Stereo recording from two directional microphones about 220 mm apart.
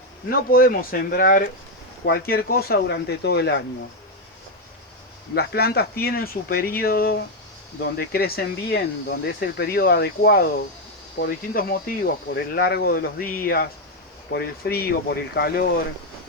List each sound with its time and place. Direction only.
0.3 s speech: 40° left (ahead or behind)
5.3 s speech: 45° left (ahead or behind)